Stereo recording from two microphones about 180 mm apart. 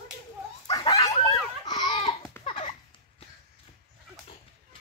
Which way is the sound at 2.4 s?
30° left (ahead or behind).